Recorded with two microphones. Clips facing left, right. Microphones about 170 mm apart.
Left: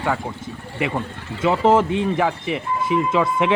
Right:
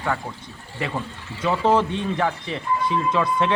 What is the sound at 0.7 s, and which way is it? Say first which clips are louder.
Speech: left 4 dB; 15° left (ahead or behind).